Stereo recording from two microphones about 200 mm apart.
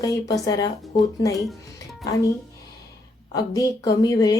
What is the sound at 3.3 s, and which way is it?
A woman's voice, 20° left (ahead or behind).